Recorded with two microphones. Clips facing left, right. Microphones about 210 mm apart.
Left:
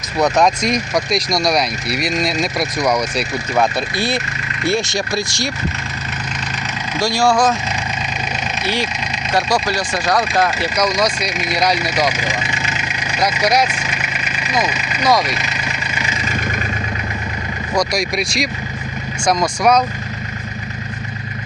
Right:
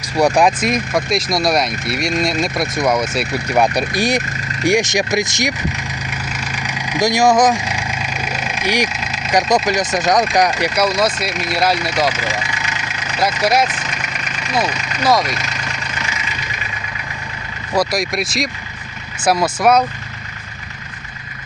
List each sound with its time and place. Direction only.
0.2 s speech: 10° right (ahead or behind)
6.6 s vehicle: 15° right (ahead or behind)
9.6 s speech: 20° right (ahead or behind)
10.6 s speech: 5° right (ahead or behind)
12.5 s vehicle: 25° left (ahead or behind)
13.4 s speech: 5° right (ahead or behind)
13.7 s vehicle: 10° left (ahead or behind)
14.5 s speech: 5° left (ahead or behind)
16.1 s vehicle: 45° left (ahead or behind)
17.7 s speech: centre (ahead or behind)